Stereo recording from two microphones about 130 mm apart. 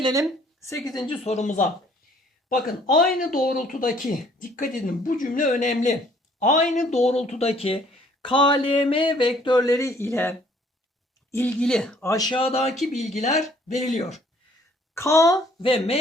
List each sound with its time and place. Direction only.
0.0 s a woman's voice: 25° right (ahead or behind)
0.9 s speech: 30° left (ahead or behind)
1.1 s speech: 55° left (ahead or behind); by 1.6 s 70° left (ahead or behind)
2.8 s speech: 90° left; by 7.8 s 50° left (ahead or behind)
8.2 s speech: 40° left (ahead or behind); by 12.0 s 5° left (ahead or behind)
12.3 s speech: 50° left (ahead or behind)
12.8 s speech: 65° left (ahead or behind)
14.9 s a child's voice: 20° left (ahead or behind)
15.5 s speech: 45° left (ahead or behind)